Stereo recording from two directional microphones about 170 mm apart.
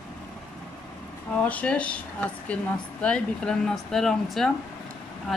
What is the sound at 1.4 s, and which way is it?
Speech, 10° left (ahead or behind).